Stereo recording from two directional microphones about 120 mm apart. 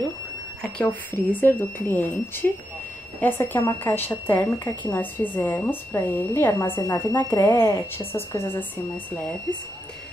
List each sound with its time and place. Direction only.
0.6 s speech: 10° left (ahead or behind)